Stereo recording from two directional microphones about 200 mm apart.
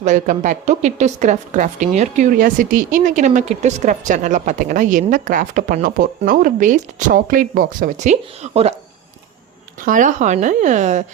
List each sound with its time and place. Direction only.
0.0 s a woman's voice: 40° right (ahead or behind)
9.8 s a woman's voice: 40° right (ahead or behind)